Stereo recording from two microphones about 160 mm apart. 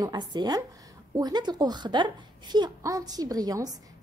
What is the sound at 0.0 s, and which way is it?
A woman's voice, 25° right (ahead or behind).